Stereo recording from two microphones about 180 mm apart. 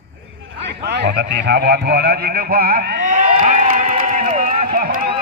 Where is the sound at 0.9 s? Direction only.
70° right (ahead or behind).